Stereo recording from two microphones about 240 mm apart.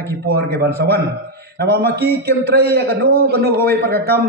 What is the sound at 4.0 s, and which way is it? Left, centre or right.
Speech, centre.